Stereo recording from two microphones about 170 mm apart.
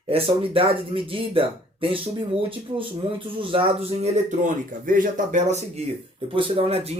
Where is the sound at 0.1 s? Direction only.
30° right (ahead or behind).